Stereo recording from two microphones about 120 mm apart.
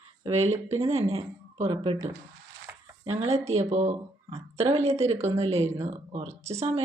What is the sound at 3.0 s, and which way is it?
Speech, 60° right (ahead or behind).